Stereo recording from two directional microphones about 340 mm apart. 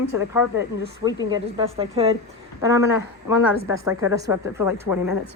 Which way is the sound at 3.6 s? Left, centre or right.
Centre.